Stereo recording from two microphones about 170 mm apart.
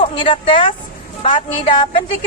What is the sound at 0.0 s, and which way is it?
A woman's voice, 30° left (ahead or behind).